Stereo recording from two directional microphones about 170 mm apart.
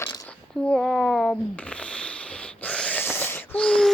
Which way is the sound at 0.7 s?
Centre (ahead or behind).